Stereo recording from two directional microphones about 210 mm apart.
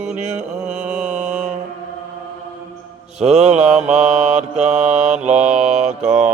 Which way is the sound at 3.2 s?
30° right (ahead or behind).